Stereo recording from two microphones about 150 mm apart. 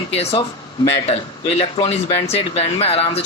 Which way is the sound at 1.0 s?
40° left (ahead or behind).